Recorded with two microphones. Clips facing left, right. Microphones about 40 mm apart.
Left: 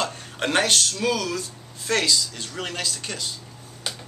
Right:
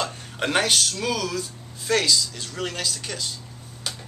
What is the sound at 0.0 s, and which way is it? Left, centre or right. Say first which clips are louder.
Speech: left 1 dB; centre.